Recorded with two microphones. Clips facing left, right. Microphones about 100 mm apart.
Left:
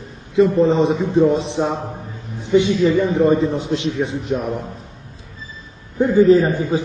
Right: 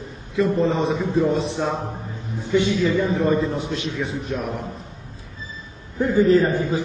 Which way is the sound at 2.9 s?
25° left (ahead or behind).